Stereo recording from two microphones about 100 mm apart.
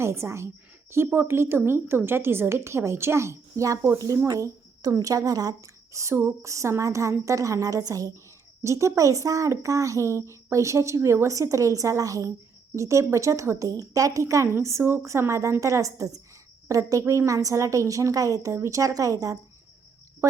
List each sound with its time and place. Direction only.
0.0 s a woman's voice: 25° right (ahead or behind)